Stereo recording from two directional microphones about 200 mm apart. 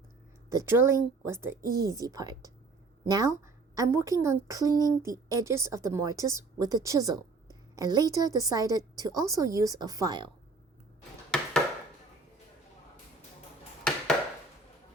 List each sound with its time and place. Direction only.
0.5 s a woman's voice: 15° right (ahead or behind)
1.6 s speech: 50° right (ahead or behind)
1.9 s a woman's voice: 15° right (ahead or behind)
11.3 s a sound: 5° left (ahead or behind)